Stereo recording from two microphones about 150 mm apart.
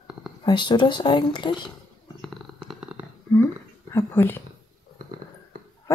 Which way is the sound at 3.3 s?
15° left (ahead or behind).